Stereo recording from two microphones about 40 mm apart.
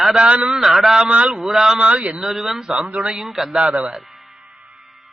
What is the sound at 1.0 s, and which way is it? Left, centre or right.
Speech, right.